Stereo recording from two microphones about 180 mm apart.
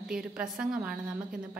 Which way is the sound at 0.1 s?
5° right (ahead or behind).